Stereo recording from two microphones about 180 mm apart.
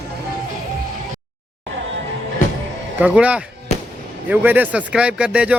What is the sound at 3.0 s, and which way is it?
Speech, 5° right (ahead or behind).